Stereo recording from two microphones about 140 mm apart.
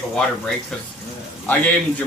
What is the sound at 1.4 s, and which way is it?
Speech, 10° left (ahead or behind).